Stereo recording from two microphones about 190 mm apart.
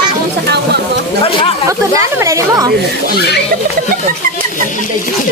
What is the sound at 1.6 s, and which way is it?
Speech, 15° right (ahead or behind).